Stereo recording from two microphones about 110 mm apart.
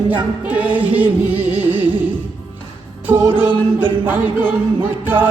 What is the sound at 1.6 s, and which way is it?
Music, 15° right (ahead or behind).